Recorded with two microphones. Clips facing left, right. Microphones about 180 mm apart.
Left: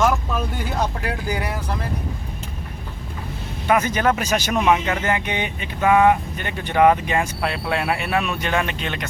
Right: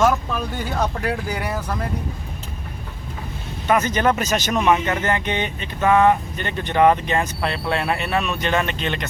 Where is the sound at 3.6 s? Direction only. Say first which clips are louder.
Even; 10° left (ahead or behind).